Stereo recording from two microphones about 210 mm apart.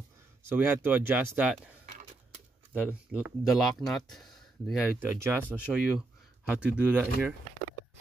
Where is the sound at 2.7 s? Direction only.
5° right (ahead or behind).